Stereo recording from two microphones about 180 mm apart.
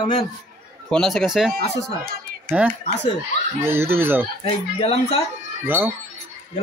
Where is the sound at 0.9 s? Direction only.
Centre (ahead or behind).